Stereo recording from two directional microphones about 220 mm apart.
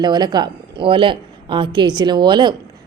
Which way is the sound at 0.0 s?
20° right (ahead or behind).